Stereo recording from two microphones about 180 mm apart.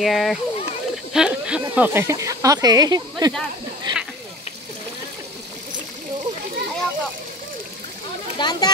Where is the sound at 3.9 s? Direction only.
25° right (ahead or behind).